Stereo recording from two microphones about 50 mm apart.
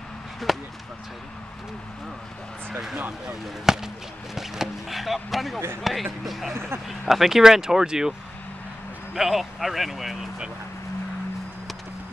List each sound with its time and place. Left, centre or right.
0.5 s a sound: centre
3.7 s speech: centre
6.5 s speech: right
6.9 s speech: centre
9.1 s speech: centre